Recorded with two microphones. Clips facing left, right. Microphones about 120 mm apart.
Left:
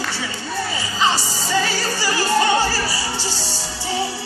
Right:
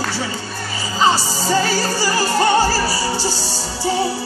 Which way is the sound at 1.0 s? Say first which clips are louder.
Right 5 dB; 40° right (ahead or behind).